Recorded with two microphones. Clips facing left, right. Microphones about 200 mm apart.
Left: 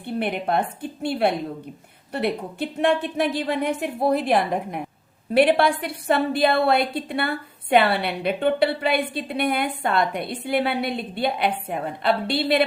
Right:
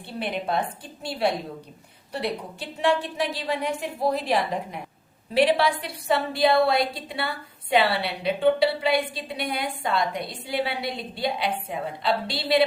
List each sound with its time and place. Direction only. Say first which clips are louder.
0.0 s a woman's voice: left 4 dB; 55° left (ahead or behind)